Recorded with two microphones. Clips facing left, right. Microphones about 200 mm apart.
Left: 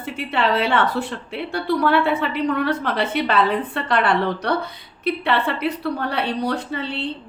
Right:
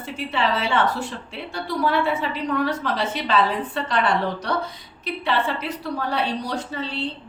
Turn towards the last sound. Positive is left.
turn(degrees=60)  # may be behind; listen again after turning